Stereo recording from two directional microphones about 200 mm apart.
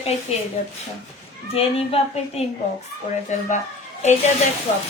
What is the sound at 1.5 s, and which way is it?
Speech, 30° left (ahead or behind).